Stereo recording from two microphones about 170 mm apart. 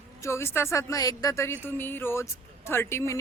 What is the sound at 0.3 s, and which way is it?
Speech, 15° left (ahead or behind).